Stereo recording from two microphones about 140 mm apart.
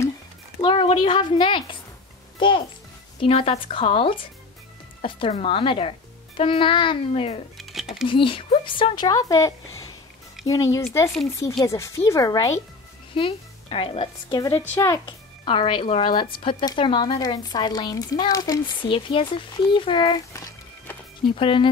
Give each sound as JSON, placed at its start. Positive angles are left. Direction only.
{"t": 0.6, "sound": "a woman's voice", "side_deg": 35}
{"t": 7.5, "sound": "a sound", "side_deg": 0}
{"t": 8.1, "sound": "speech", "side_deg": 35}
{"t": 13.1, "sound": "a woman's voice", "side_deg": 40}
{"t": 14.7, "sound": "speech", "side_deg": 20}
{"t": 15.4, "sound": "speech", "side_deg": 35}
{"t": 18.9, "sound": "speech", "side_deg": 40}
{"t": 21.4, "sound": "speech", "side_deg": 40}